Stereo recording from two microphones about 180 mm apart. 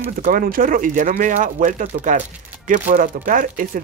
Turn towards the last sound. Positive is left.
turn(degrees=-50)  # may be behind; listen again after turning